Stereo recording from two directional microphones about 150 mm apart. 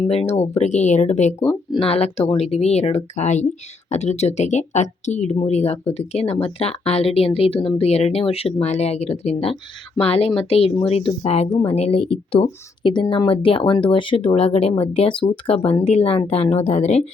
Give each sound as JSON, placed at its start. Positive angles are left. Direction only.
{"t": 0.0, "sound": "speech", "side_deg": 40}
{"t": 1.5, "sound": "speech", "side_deg": 35}